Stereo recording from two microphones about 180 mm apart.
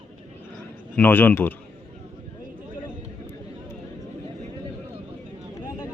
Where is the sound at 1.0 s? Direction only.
10° left (ahead or behind).